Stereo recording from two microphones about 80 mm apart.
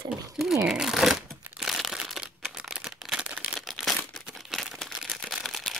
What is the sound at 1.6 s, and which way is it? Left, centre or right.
Crushing, centre.